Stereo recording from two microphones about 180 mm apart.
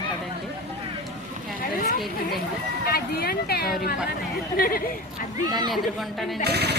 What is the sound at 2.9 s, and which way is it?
Speech, 60° left (ahead or behind).